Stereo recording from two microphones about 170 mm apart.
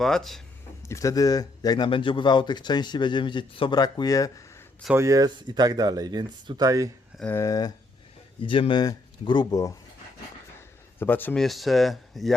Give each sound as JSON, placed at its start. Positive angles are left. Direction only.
{"t": 0.0, "sound": "speech", "side_deg": 0}
{"t": 0.9, "sound": "a man's voice", "side_deg": 20}
{"t": 4.9, "sound": "speech", "side_deg": -20}
{"t": 7.2, "sound": "speech", "side_deg": 15}
{"t": 8.4, "sound": "a man's voice", "side_deg": 30}
{"t": 11.0, "sound": "speech", "side_deg": 10}